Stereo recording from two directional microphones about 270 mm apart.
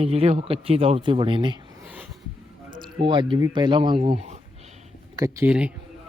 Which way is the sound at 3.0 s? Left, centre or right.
Centre.